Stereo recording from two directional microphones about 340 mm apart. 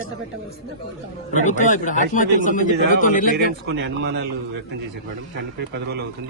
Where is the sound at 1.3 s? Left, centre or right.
Left.